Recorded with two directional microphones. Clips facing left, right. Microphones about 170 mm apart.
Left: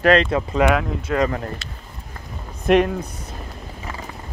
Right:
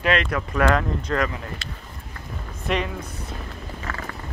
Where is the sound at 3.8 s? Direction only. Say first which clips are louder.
Even; 15° left (ahead or behind).